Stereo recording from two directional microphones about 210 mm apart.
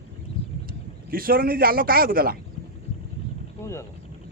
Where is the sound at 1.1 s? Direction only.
45° right (ahead or behind).